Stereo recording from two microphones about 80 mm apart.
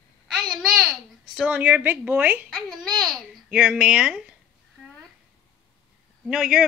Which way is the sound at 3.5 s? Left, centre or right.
Centre.